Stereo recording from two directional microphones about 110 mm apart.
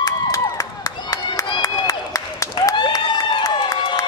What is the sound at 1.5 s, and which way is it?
Applause, 35° left (ahead or behind).